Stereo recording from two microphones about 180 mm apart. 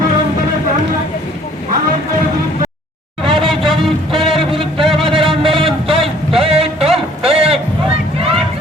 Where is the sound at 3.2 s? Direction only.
30° right (ahead or behind).